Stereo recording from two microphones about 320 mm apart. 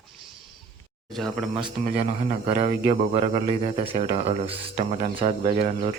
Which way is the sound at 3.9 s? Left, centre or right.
Centre.